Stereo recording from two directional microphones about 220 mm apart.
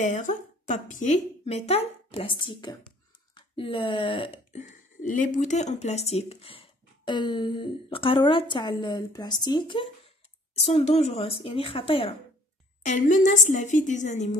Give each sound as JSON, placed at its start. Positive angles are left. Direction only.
{"t": 0.0, "sound": "a woman's voice", "side_deg": 35}